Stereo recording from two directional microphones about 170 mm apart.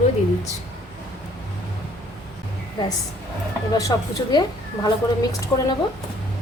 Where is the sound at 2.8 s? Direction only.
25° left (ahead or behind).